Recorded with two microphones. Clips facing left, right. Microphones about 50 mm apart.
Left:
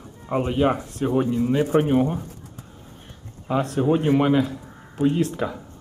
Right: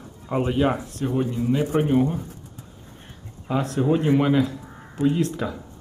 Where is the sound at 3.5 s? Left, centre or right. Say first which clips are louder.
Left 1 dB; centre.